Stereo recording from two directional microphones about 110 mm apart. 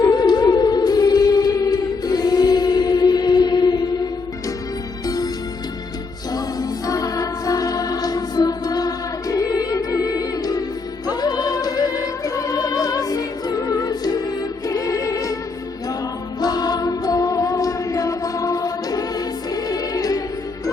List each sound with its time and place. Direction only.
0.0 s music: 40° left (ahead or behind)
5.0 s music: 35° left (ahead or behind)
6.3 s music: 35° left (ahead or behind)
16.4 s music: 35° left (ahead or behind)